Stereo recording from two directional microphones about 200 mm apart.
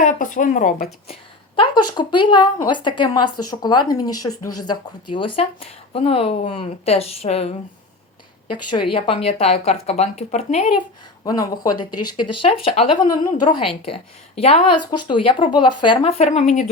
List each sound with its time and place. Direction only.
0.0 s speech: 40° left (ahead or behind)
1.5 s speech: 25° left (ahead or behind)
11.6 s speech: 20° left (ahead or behind); by 16.6 s 35° left (ahead or behind)